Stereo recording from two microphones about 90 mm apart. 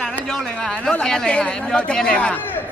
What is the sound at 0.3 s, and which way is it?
A man's voice, 10° left (ahead or behind).